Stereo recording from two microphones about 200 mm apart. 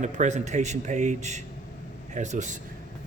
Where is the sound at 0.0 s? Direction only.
35° right (ahead or behind).